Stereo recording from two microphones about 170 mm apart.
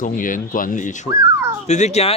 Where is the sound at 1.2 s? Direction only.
15° right (ahead or behind).